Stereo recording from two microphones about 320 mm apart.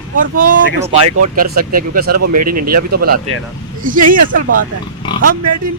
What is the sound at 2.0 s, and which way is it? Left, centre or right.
Speech, right.